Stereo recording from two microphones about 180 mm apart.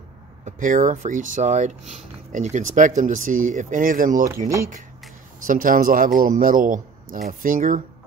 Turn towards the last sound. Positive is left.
turn(degrees=-50)  # may be behind; listen again after turning